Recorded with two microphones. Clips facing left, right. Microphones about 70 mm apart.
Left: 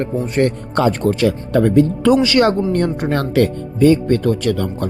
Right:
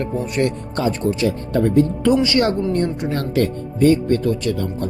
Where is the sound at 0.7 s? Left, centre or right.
Left.